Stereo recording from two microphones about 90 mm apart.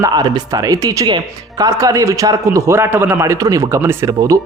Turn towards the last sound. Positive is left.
turn(degrees=-40)  # may be behind; listen again after turning